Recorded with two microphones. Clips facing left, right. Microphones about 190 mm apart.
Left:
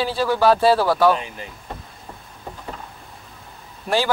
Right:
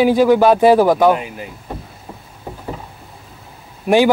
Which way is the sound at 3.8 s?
15° right (ahead or behind).